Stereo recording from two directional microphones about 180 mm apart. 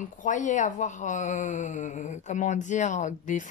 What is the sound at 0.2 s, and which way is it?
A woman's voice, 45° left (ahead or behind).